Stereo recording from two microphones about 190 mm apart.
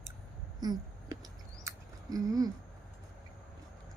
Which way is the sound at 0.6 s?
20° right (ahead or behind).